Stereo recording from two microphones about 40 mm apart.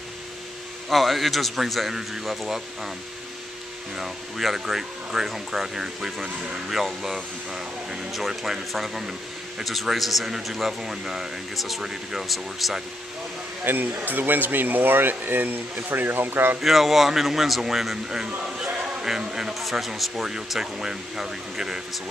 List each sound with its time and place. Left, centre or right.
0.8 s speech: centre
3.9 s speech: centre
13.7 s speech: right
16.6 s speech: centre
18.6 s a sound: centre
19.6 s speech: centre